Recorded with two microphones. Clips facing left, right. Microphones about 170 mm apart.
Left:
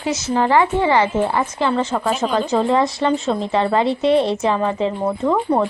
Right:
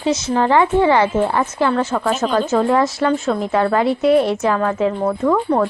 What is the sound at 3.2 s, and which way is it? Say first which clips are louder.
A woman's voice: right 1 dB; 20° left (ahead or behind).